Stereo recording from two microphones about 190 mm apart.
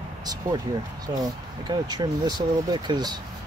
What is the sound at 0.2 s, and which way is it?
Speech, 20° right (ahead or behind).